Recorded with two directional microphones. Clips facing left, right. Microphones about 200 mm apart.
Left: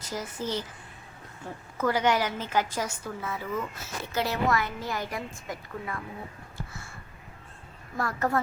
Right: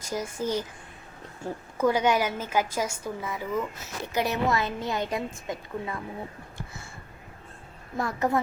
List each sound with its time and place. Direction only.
0.1 s a woman's voice: 10° right (ahead or behind)
1.8 s a woman's voice: 15° right (ahead or behind)
7.9 s a woman's voice: 15° right (ahead or behind)